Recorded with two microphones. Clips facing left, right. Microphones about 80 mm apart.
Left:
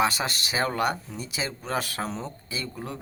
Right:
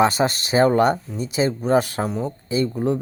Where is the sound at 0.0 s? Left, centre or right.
Right.